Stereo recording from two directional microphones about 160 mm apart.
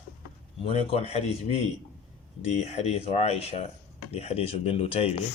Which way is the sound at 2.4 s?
45° left (ahead or behind).